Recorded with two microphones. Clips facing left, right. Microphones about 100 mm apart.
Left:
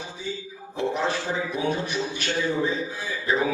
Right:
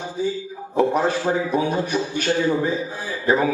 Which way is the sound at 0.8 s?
45° right (ahead or behind).